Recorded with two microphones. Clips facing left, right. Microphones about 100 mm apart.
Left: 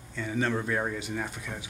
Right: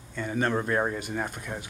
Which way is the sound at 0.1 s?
50° right (ahead or behind).